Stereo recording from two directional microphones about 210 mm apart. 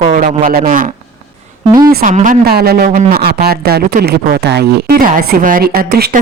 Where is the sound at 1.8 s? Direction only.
40° right (ahead or behind).